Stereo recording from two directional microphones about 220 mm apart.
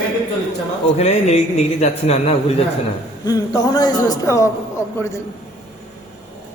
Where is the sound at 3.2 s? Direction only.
15° left (ahead or behind).